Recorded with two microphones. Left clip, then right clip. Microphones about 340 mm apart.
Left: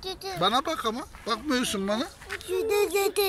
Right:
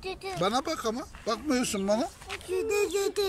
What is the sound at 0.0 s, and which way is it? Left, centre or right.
A woman's voice, centre.